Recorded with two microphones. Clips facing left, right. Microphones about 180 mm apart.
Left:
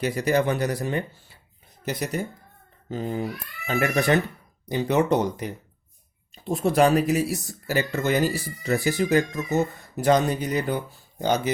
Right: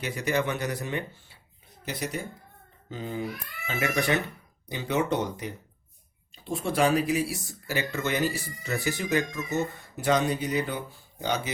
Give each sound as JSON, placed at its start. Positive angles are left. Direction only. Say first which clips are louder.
{"t": 0.0, "sound": "speech", "louder": "left 5 dB", "side_deg": 40}
{"t": 2.9, "sound": "speech", "louder": "left 5 dB", "side_deg": 45}
{"t": 6.5, "sound": "speech", "louder": "left 5 dB", "side_deg": 40}